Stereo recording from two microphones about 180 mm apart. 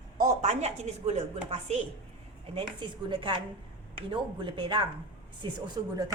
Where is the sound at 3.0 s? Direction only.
25° right (ahead or behind).